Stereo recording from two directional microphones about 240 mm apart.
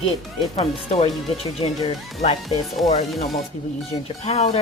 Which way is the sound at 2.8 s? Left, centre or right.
Left.